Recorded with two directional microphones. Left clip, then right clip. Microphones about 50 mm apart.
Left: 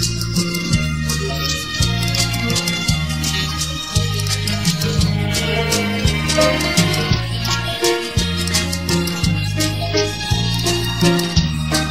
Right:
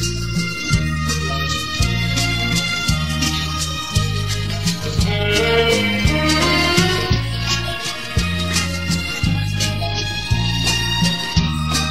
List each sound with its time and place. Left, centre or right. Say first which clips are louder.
5.8 s music: right 2 dB; right
10.6 s music: right 1 dB; right